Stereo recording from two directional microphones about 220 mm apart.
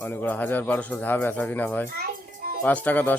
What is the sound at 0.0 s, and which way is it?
A man's voice, 10° left (ahead or behind).